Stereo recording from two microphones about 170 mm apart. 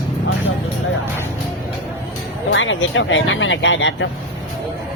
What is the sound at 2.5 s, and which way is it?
Speech, 90° left.